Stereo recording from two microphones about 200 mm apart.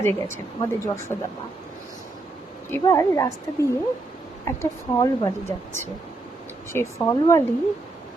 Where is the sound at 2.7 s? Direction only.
15° left (ahead or behind).